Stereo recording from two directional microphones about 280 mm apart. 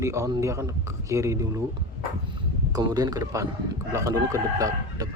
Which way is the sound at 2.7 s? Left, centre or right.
Centre.